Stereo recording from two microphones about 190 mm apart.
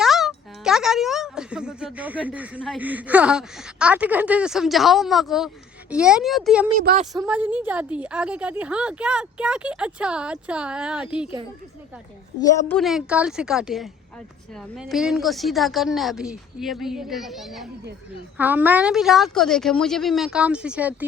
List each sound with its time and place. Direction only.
0.0 s speech: centre (ahead or behind)
6.7 s a woman's voice: 40° right (ahead or behind)
7.3 s speech: 10° right (ahead or behind)
12.4 s a woman's voice: 15° left (ahead or behind)
12.7 s speech: centre (ahead or behind)